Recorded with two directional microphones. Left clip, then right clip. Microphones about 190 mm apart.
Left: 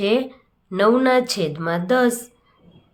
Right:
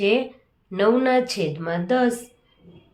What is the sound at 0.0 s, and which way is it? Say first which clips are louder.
Speech: left 1 dB; 20° left (ahead or behind).